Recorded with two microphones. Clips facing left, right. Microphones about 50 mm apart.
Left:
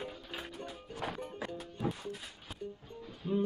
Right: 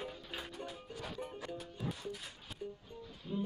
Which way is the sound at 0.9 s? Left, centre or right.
Left.